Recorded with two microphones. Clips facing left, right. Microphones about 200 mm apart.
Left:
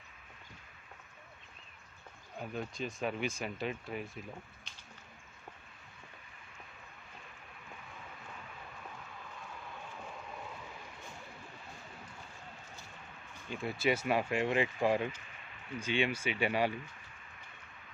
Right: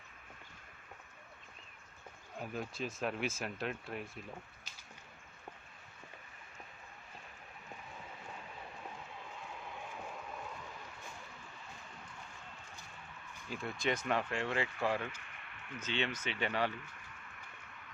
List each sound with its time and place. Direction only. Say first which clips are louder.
2.4 s speech: left 1 dB; centre (ahead or behind)
13.5 s speech: left 4 dB; 5° left (ahead or behind)
15.2 s a sound: left 1 dB; 60° right (ahead or behind)
15.8 s speech: left 5 dB; 10° left (ahead or behind)